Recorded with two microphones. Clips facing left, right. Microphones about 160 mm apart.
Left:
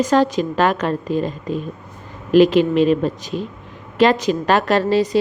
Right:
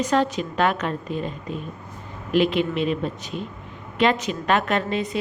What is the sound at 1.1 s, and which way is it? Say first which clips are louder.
Speech: left 7 dB; 90° left.